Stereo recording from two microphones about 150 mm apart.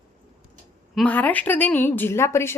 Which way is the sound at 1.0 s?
10° left (ahead or behind).